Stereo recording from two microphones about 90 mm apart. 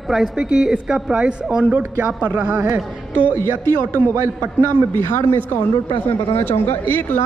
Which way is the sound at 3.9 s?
35° right (ahead or behind).